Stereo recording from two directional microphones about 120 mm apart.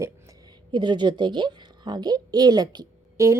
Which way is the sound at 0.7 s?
40° right (ahead or behind).